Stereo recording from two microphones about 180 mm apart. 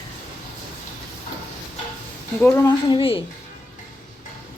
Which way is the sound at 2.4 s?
15° left (ahead or behind).